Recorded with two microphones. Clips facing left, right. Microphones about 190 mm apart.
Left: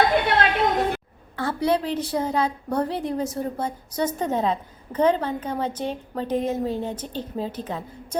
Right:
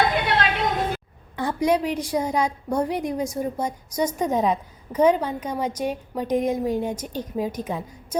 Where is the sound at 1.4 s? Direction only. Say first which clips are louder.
Right 1 dB; 15° right (ahead or behind).